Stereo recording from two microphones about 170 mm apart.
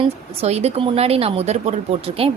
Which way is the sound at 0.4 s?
40° right (ahead or behind).